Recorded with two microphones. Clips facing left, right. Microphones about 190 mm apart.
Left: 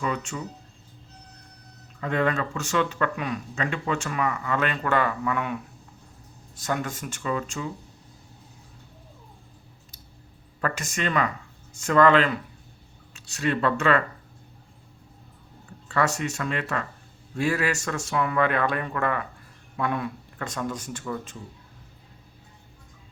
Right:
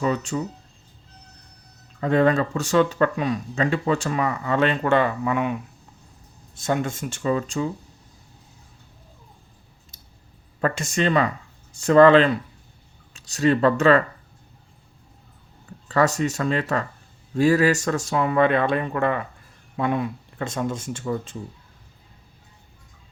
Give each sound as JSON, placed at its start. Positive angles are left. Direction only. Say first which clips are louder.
{"t": 0.0, "sound": "speech", "louder": "right 6 dB", "side_deg": -35}
{"t": 2.0, "sound": "speech", "louder": "right 6 dB", "side_deg": -35}
{"t": 6.6, "sound": "speech", "louder": "right 5 dB", "side_deg": -25}
{"t": 10.6, "sound": "speech", "louder": "right 6 dB", "side_deg": -30}
{"t": 15.9, "sound": "speech", "louder": "right 5 dB", "side_deg": -35}